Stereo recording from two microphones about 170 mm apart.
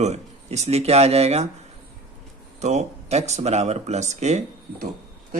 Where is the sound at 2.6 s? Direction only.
40° right (ahead or behind).